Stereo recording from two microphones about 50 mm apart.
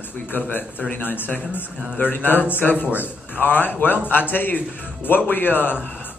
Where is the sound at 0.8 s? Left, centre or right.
Left.